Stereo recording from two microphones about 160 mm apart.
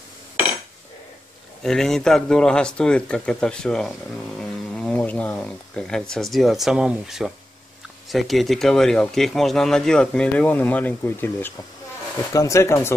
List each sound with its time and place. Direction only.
1.6 s speech: centre (ahead or behind)